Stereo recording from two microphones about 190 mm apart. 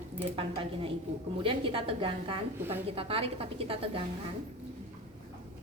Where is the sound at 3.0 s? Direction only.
30° right (ahead or behind).